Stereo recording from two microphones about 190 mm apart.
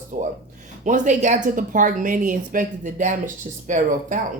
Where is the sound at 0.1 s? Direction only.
45° right (ahead or behind).